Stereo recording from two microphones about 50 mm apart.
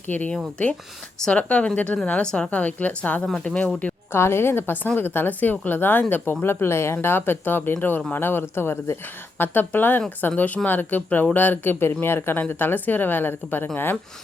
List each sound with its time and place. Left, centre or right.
0.1 s speech: left
1.3 s a woman's voice: left
2.2 s a woman's voice: centre
2.5 s a woman's voice: left
4.1 s a woman's voice: left